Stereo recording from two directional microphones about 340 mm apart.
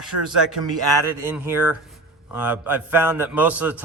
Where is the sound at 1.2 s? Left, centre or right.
Centre.